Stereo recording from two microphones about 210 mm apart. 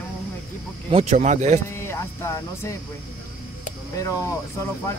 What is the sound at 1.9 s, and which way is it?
Speech, 15° left (ahead or behind).